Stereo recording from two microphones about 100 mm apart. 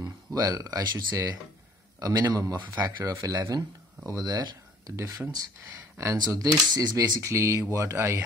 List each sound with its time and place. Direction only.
0.3 s speech: 35° right (ahead or behind)
4.9 s speech: 30° right (ahead or behind)
7.2 s speech: 30° right (ahead or behind)